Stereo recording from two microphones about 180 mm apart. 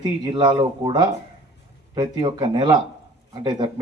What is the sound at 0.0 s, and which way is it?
Speech, 25° right (ahead or behind).